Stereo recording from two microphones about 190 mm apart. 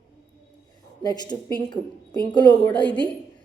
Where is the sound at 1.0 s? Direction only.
20° left (ahead or behind).